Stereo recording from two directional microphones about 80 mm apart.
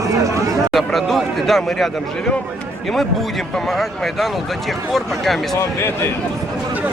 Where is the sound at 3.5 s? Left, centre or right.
Centre.